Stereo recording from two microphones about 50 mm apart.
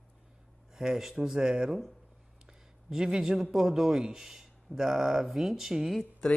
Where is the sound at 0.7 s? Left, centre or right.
Centre.